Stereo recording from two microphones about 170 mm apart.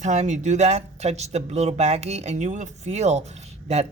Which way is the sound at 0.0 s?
45° right (ahead or behind).